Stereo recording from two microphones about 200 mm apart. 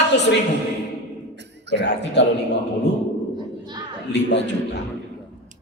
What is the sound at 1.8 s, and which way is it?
Speech, 55° left (ahead or behind).